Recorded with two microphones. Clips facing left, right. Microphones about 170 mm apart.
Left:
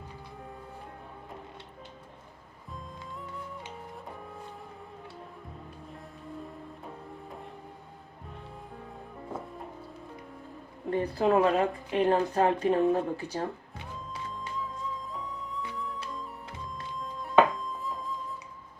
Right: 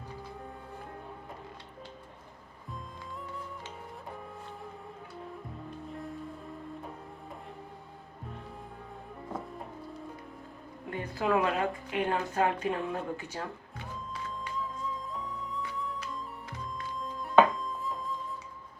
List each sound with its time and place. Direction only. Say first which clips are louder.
10.8 s speech: left 5 dB; 35° left (ahead or behind)
14.8 s music: even; centre (ahead or behind)
17.0 s music: even; centre (ahead or behind)